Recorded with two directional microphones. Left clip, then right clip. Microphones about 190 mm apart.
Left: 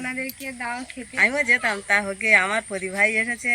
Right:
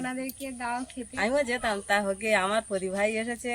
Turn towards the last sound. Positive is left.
turn(degrees=-15)  # may be behind; listen again after turning